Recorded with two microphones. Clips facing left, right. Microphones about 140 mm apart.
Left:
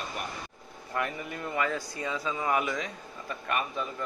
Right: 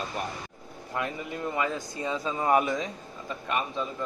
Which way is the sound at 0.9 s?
20° right (ahead or behind).